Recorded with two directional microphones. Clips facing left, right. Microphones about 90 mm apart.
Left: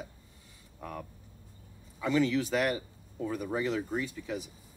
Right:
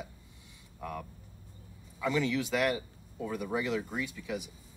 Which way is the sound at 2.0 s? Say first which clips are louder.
Left 3 dB; 35° left (ahead or behind).